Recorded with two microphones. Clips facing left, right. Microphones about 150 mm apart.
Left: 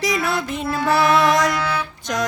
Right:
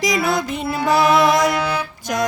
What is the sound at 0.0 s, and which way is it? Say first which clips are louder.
Music: right 2 dB; 15° right (ahead or behind).